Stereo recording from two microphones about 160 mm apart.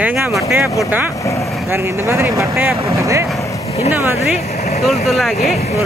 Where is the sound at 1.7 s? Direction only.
15° right (ahead or behind).